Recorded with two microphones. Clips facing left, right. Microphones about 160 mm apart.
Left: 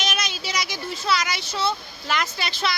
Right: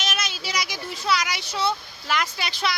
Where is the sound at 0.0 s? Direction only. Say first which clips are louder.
Left 2 dB; 5° right (ahead or behind).